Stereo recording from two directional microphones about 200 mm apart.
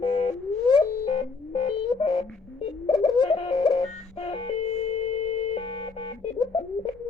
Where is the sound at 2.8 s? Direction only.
25° left (ahead or behind).